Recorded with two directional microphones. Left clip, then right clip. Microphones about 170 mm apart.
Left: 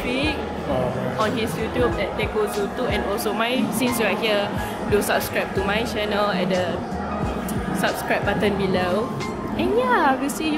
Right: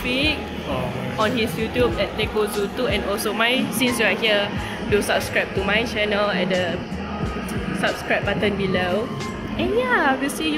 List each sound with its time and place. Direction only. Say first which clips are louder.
1.2 s speech: right 3 dB; 25° right (ahead or behind)
2.9 s speech: even; centre (ahead or behind)
7.8 s speech: even; 5° left (ahead or behind)